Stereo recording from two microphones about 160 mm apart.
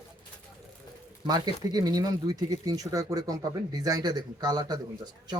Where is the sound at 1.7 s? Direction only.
25° right (ahead or behind).